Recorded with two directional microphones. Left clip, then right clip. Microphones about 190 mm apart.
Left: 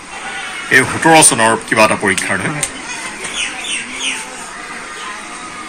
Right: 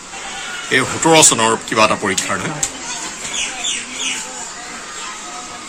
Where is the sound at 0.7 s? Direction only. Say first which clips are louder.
Left 4 dB; 10° right (ahead or behind).